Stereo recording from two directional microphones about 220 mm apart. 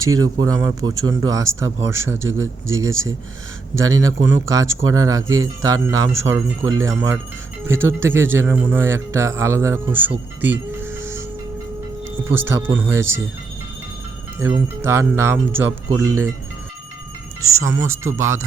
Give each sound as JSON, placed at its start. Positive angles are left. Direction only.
{"t": 0.0, "sound": "a man's voice", "side_deg": -15}
{"t": 12.1, "sound": "a man's voice", "side_deg": -10}
{"t": 14.3, "sound": "a man's voice", "side_deg": -10}
{"t": 17.4, "sound": "a man's voice", "side_deg": -15}